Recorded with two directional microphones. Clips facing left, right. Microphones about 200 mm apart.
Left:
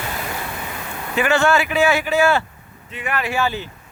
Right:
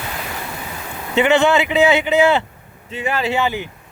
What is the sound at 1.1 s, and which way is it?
Speech, 20° right (ahead or behind).